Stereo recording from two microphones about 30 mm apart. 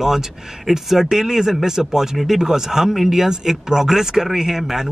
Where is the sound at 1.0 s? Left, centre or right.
Centre.